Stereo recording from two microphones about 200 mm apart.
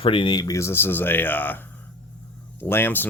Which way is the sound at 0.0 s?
25° left (ahead or behind).